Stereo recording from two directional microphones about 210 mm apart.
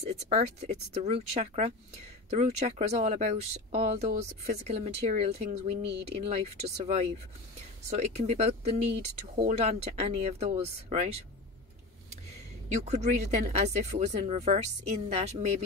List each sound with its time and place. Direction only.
0.0 s speech: 30° right (ahead or behind)
12.6 s speech: 35° right (ahead or behind)